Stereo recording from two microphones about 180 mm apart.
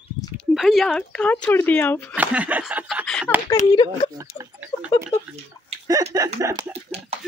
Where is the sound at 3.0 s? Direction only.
5° left (ahead or behind).